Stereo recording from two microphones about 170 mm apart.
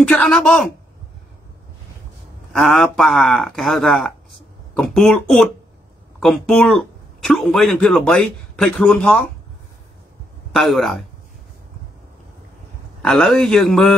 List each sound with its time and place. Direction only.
0.0 s speech: 5° left (ahead or behind)
2.5 s speech: centre (ahead or behind)
10.5 s speech: centre (ahead or behind)
13.0 s speech: centre (ahead or behind)